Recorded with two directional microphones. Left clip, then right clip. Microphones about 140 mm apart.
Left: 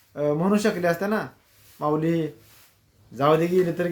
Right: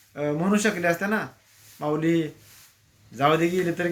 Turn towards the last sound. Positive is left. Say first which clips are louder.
# left 2 dB
turn(degrees=30)  # may be behind; listen again after turning